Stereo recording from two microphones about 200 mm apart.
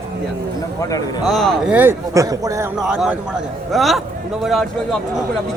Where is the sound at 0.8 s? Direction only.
15° left (ahead or behind).